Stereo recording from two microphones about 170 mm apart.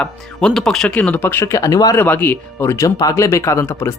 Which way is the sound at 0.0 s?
5° left (ahead or behind).